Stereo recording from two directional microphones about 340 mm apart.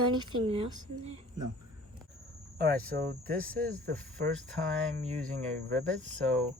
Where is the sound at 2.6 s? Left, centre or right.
Right.